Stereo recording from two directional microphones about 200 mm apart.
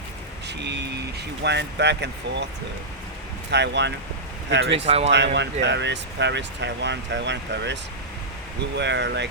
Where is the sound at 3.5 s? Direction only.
60° right (ahead or behind).